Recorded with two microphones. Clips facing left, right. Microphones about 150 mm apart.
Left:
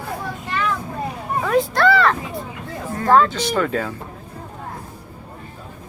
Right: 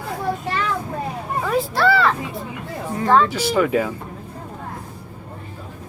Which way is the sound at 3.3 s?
10° right (ahead or behind).